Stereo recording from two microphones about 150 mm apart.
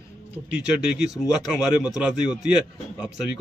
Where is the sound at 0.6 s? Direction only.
5° right (ahead or behind).